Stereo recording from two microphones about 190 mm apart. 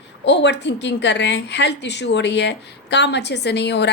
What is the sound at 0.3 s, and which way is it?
A woman's voice, 65° left (ahead or behind).